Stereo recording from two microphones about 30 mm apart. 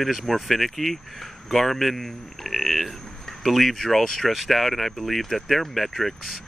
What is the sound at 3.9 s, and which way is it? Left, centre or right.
Speech, centre.